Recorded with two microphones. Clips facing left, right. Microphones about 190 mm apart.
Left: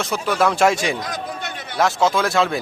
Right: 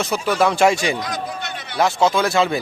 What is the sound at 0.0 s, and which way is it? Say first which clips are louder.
Speech: right 1 dB; centre (ahead or behind).